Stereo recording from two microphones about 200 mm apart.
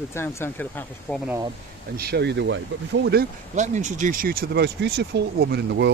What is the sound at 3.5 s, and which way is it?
Speech, 35° right (ahead or behind).